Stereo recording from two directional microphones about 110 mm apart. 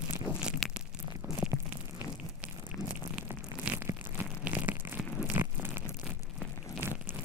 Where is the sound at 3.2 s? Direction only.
20° right (ahead or behind).